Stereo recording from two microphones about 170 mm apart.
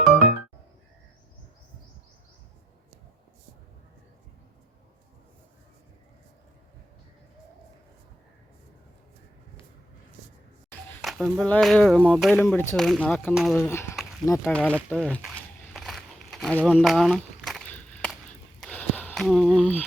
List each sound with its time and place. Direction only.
11.0 s speech: centre (ahead or behind)
13.6 s speech: 15° left (ahead or behind)
15.7 s crumpling: centre (ahead or behind)
16.6 s speech: 5° right (ahead or behind)
18.6 s a sound: 10° left (ahead or behind)